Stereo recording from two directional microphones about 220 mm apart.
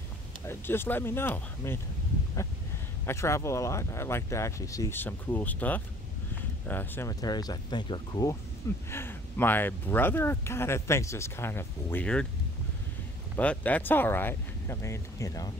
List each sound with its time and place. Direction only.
0.5 s speech: 10° left (ahead or behind)
3.1 s speech: 10° left (ahead or behind)
13.4 s speech: 5° left (ahead or behind)